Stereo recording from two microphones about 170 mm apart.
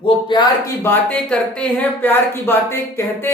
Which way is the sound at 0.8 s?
10° left (ahead or behind).